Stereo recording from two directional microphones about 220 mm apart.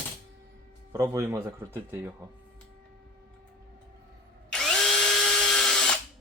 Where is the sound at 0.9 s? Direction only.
15° right (ahead or behind).